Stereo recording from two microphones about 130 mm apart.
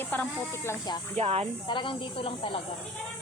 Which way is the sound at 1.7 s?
40° left (ahead or behind).